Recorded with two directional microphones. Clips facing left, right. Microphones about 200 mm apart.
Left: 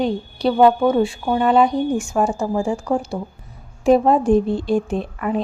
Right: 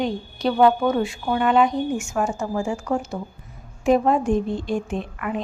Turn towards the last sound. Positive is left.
turn(degrees=35)  # may be behind; listen again after turning